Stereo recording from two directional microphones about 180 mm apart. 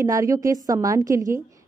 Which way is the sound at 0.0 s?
15° right (ahead or behind).